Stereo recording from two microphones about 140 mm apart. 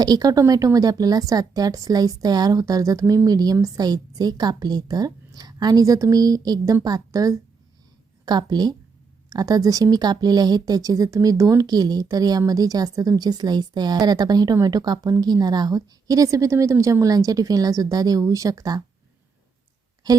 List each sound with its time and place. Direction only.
0.0 s speech: 30° right (ahead or behind)
20.1 s speech: 25° right (ahead or behind)